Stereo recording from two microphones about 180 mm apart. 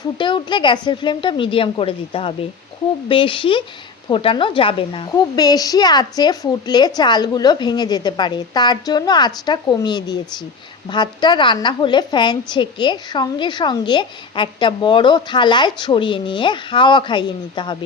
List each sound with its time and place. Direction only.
0.0 s a woman's voice: 25° left (ahead or behind)